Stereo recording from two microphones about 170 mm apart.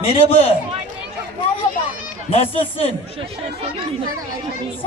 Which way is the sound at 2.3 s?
35° left (ahead or behind).